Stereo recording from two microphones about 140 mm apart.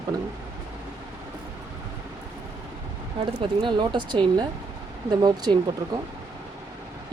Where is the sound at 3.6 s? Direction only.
35° right (ahead or behind).